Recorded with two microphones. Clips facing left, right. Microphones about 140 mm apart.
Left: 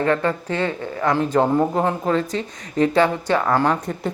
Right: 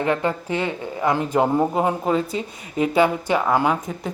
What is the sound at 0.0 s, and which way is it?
Speech, 15° right (ahead or behind).